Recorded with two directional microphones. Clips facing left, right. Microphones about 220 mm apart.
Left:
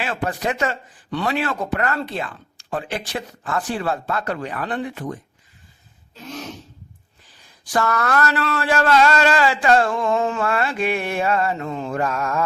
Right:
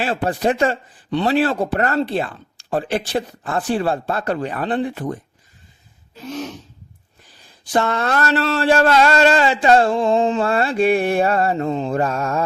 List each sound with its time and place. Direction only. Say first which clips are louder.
0.0 s speech: right 5 dB; 35° right (ahead or behind)
7.6 s speech: right 2 dB; 25° right (ahead or behind)